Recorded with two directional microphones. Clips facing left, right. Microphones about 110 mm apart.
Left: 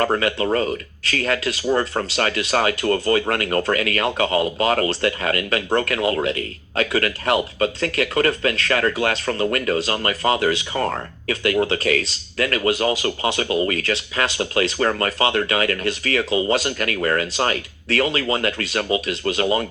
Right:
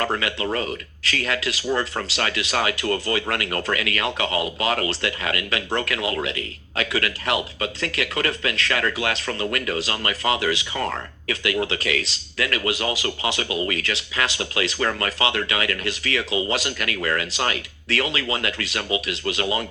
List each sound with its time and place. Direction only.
0.0 s speech: 35° left (ahead or behind)